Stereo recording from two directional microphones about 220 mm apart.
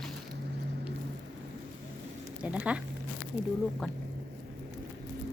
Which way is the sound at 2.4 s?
5° right (ahead or behind).